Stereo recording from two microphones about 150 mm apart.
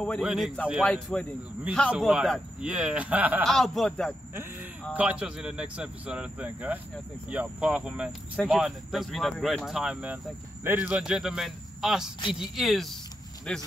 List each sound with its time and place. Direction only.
0.0 s speech: centre (ahead or behind)
3.4 s speech: centre (ahead or behind)
4.9 s speech: 10° right (ahead or behind)